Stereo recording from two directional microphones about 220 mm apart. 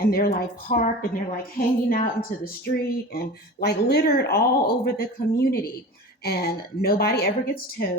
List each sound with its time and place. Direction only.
0.0 s a woman's voice: 45° left (ahead or behind)